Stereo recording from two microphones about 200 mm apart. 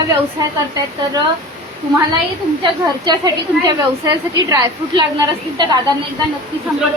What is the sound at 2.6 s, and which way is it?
Speech, 20° right (ahead or behind).